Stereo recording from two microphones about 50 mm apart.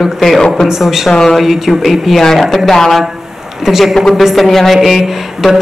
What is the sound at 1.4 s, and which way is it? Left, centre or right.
A woman's voice, centre.